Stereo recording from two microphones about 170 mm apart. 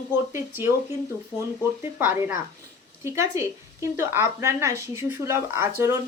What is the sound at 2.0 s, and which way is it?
Speech, 10° right (ahead or behind).